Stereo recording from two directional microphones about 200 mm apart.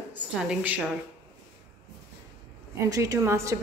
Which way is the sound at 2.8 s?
15° right (ahead or behind).